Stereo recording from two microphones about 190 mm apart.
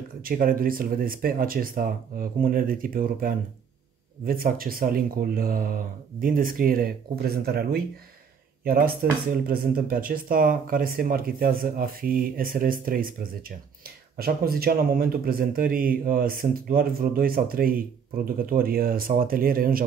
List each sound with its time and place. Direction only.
0.2 s speech: 50° right (ahead or behind)